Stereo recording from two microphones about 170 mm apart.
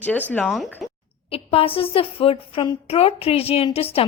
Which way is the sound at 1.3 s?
35° left (ahead or behind).